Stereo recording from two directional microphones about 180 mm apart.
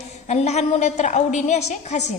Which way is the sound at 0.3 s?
40° left (ahead or behind).